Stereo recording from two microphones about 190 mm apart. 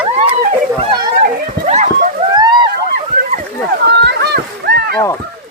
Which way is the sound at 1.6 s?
35° right (ahead or behind).